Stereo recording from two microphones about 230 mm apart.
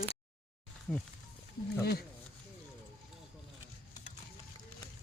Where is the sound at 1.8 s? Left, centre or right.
Left.